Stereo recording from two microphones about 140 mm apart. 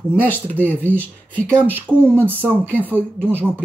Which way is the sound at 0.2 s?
15° left (ahead or behind).